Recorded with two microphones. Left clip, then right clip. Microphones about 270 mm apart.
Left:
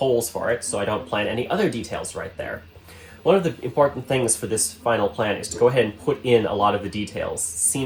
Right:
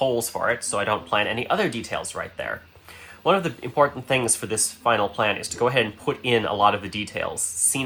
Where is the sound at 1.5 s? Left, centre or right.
Centre.